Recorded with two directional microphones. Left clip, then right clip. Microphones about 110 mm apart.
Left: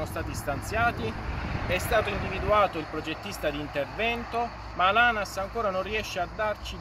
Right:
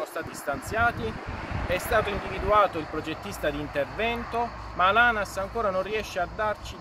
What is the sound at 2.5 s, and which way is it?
Speech, 25° right (ahead or behind).